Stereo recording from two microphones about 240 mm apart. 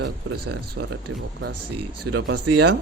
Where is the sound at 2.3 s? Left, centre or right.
Right.